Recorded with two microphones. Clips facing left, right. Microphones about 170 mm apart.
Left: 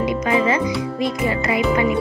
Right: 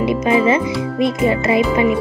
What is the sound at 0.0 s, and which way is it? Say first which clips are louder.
Music: right 4 dB; 25° right (ahead or behind).